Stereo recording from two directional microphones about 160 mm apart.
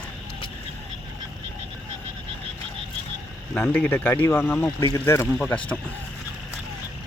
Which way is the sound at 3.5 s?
10° left (ahead or behind).